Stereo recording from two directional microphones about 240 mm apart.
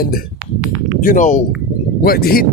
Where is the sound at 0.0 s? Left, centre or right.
Left.